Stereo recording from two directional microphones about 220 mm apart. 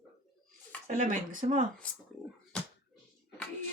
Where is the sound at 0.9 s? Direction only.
35° right (ahead or behind).